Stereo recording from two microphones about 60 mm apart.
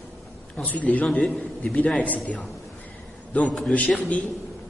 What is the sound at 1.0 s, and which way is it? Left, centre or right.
Speech, centre.